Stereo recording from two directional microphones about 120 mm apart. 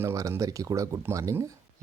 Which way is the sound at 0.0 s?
25° right (ahead or behind).